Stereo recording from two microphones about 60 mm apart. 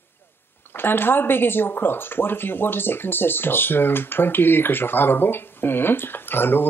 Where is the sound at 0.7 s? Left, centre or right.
Left.